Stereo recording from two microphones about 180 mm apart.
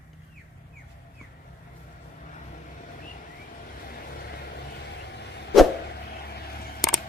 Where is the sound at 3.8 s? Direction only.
55° left (ahead or behind).